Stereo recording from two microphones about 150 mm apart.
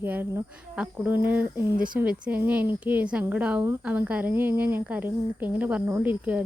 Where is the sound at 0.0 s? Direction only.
15° right (ahead or behind).